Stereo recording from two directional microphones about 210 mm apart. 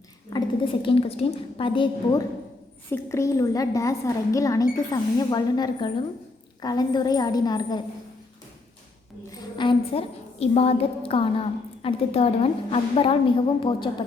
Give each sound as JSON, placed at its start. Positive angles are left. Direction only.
{"t": 0.3, "sound": "a woman's voice", "side_deg": 20}
{"t": 9.3, "sound": "a woman's voice", "side_deg": 20}